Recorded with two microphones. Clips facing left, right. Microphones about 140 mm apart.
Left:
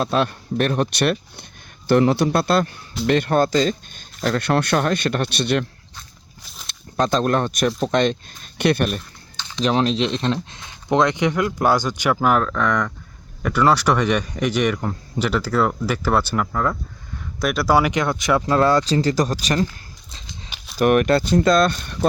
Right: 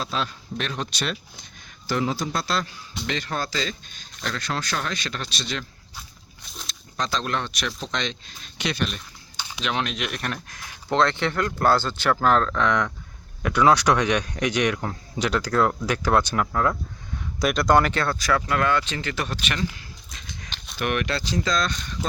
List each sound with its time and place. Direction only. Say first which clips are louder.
0.0 s speech: left 8 dB; 55° left (ahead or behind)
6.7 s speech: left 8 dB; 55° left (ahead or behind)
9.6 s speech: left 9 dB; 35° left (ahead or behind); by 12.7 s 5° left (ahead or behind)
13.8 s speech: left 2 dB; 10° left (ahead or behind); by 19.6 s 40° left (ahead or behind)
20.1 s horse: left 1 dB; 30° left (ahead or behind)
20.7 s speech: left 10 dB; 45° left (ahead or behind)